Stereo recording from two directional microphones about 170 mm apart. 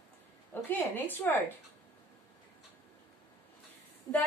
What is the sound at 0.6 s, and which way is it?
Speech, 10° left (ahead or behind).